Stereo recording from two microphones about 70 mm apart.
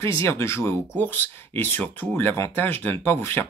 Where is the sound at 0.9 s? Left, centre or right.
Left.